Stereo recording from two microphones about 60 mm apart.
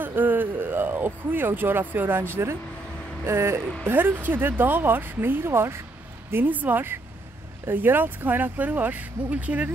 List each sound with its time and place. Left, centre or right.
0.0 s speech: right
6.3 s speech: right